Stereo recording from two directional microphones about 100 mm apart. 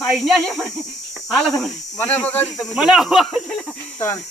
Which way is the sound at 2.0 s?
20° left (ahead or behind).